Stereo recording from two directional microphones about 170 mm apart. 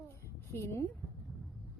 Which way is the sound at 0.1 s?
15° left (ahead or behind).